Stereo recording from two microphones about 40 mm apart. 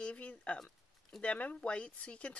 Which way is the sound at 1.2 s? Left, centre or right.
Left.